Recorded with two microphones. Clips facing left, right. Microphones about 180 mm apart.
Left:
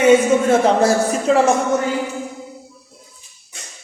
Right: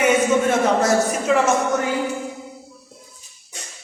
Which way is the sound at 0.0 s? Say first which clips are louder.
Left 4 dB; 30° left (ahead or behind).